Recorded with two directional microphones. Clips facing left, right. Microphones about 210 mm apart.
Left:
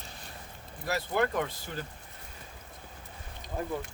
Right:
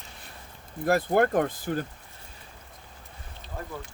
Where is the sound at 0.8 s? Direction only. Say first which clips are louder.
Right 7 dB; 50° right (ahead or behind).